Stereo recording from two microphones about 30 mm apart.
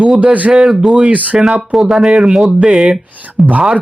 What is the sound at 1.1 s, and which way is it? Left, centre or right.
Speech, right.